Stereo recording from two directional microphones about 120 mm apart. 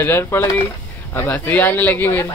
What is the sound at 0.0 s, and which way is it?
Speech, 20° left (ahead or behind).